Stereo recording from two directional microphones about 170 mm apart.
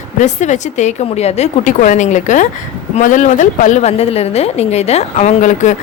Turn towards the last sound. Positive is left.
turn(degrees=45)  # may be behind; listen again after turning